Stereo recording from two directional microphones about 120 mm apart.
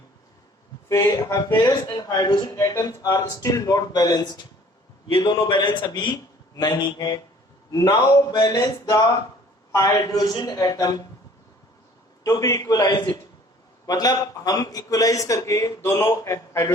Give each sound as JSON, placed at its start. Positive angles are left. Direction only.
{"t": 0.9, "sound": "a man's voice", "side_deg": 30}
{"t": 12.2, "sound": "a man's voice", "side_deg": 30}